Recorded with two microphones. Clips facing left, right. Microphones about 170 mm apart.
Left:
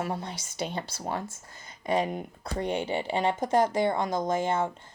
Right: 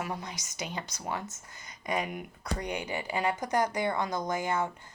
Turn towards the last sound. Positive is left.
turn(degrees=25)  # may be behind; listen again after turning